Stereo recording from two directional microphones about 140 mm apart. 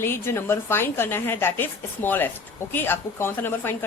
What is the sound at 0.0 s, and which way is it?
A woman's voice, 15° left (ahead or behind).